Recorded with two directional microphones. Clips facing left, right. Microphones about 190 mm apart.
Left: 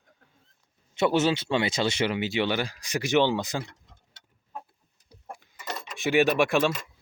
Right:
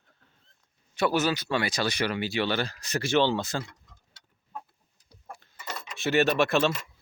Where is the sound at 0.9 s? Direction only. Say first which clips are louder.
Left 2 dB; 25° left (ahead or behind).